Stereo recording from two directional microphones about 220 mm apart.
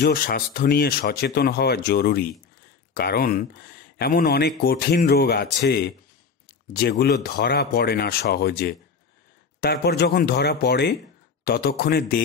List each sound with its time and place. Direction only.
0.0 s speech: 45° left (ahead or behind)